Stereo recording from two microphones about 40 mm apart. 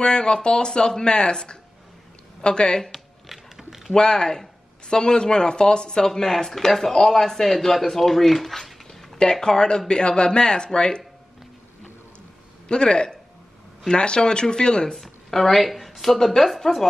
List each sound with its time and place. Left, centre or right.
0.0 s speech: left
2.9 s typing: centre
3.9 s speech: centre
9.2 s speech: centre
12.6 s a man's voice: left
15.0 s speech: centre